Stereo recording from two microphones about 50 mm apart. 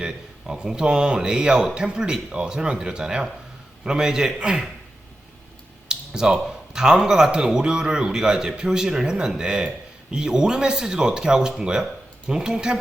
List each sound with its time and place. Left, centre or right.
0.0 s speech: centre
5.9 s speech: centre